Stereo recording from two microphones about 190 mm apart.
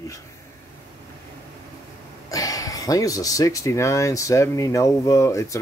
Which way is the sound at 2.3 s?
20° left (ahead or behind).